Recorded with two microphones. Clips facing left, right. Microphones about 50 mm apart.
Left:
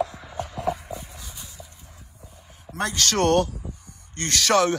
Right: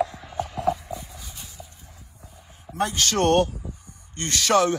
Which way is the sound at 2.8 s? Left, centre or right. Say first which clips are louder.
Even; left.